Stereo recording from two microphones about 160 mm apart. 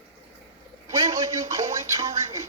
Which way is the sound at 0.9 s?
20° right (ahead or behind).